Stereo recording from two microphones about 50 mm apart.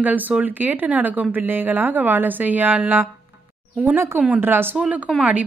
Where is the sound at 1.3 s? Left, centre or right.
Right.